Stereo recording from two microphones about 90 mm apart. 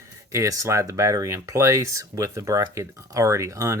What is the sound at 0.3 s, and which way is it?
Speech, 35° right (ahead or behind).